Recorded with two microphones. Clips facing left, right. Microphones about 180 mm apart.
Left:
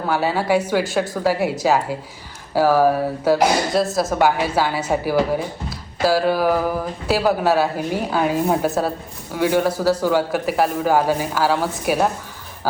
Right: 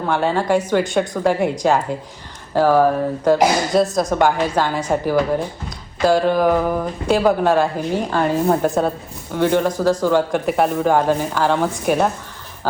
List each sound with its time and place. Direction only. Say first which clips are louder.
0.1 s a woman's voice: right 1 dB; 5° left (ahead or behind)